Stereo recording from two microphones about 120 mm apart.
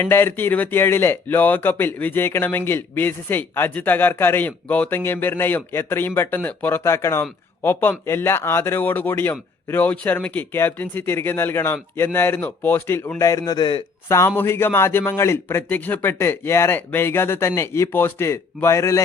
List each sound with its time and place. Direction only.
0.0 s speech: 20° left (ahead or behind); by 13.8 s 40° left (ahead or behind)
14.1 s a man's voice: 20° left (ahead or behind)